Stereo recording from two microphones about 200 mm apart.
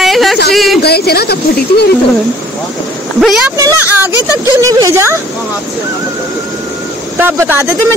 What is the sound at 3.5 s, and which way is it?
Speech, 15° right (ahead or behind).